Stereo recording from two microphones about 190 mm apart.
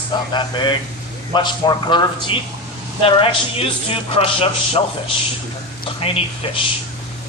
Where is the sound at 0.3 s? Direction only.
25° left (ahead or behind).